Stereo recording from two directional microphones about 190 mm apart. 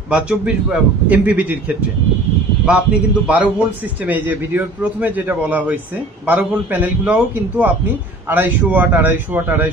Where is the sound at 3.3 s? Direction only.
5° right (ahead or behind).